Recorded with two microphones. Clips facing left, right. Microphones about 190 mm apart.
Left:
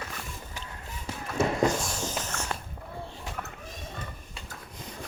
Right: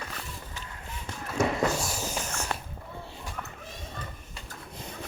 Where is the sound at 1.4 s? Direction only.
5° right (ahead or behind).